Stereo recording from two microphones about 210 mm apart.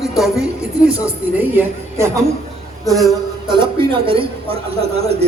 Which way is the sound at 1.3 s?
10° right (ahead or behind).